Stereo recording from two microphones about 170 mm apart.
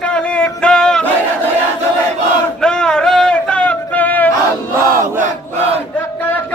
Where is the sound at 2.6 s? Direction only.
5° left (ahead or behind).